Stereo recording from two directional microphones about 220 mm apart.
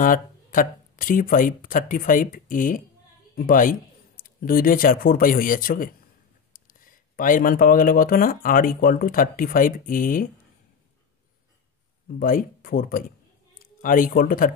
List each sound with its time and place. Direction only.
0.0 s speech: 40° left (ahead or behind)
12.2 s speech: 40° left (ahead or behind)